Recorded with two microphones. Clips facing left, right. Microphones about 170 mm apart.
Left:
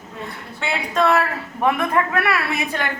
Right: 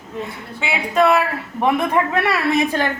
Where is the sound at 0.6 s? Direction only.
10° right (ahead or behind).